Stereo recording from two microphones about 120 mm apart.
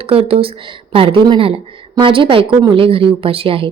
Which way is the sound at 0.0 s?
50° right (ahead or behind).